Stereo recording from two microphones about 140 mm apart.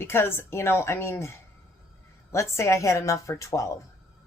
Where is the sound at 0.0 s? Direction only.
15° left (ahead or behind).